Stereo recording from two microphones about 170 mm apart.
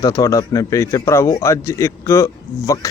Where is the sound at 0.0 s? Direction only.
20° left (ahead or behind).